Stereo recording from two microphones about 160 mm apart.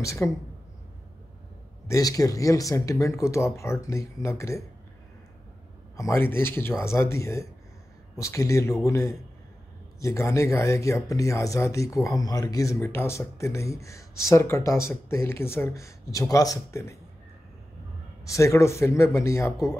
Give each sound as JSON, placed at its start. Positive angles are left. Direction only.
{"t": 0.0, "sound": "speech", "side_deg": 20}
{"t": 1.9, "sound": "speech", "side_deg": 20}
{"t": 5.9, "sound": "speech", "side_deg": 15}
{"t": 18.2, "sound": "speech", "side_deg": 20}